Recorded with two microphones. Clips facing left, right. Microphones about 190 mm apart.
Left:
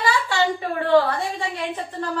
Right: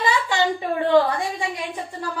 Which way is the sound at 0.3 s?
15° right (ahead or behind).